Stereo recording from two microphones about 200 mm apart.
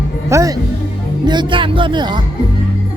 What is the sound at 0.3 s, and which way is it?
Speech, 15° right (ahead or behind).